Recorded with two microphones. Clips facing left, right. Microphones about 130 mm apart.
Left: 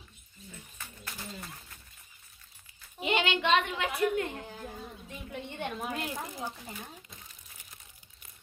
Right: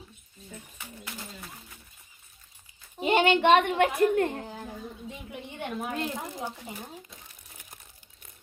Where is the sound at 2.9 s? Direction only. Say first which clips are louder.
Right 7 dB; 40° right (ahead or behind).